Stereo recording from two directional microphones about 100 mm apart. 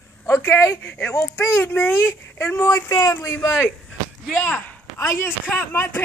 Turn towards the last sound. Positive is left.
turn(degrees=20)  # may be behind; listen again after turning